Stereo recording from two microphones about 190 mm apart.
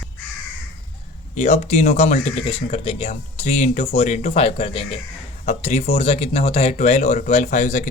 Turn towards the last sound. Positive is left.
turn(degrees=40)  # may be behind; listen again after turning